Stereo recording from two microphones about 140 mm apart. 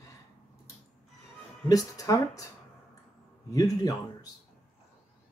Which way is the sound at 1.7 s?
25° left (ahead or behind).